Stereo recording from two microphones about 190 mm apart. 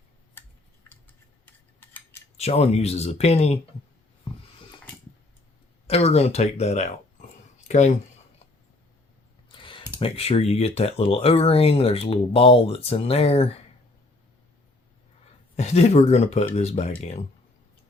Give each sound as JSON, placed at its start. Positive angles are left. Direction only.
{"t": 1.5, "sound": "scissors", "side_deg": 10}
{"t": 2.4, "sound": "speech", "side_deg": 35}
{"t": 5.9, "sound": "speech", "side_deg": 35}
{"t": 9.5, "sound": "a sound", "side_deg": 25}
{"t": 10.0, "sound": "speech", "side_deg": 30}
{"t": 15.5, "sound": "speech", "side_deg": 35}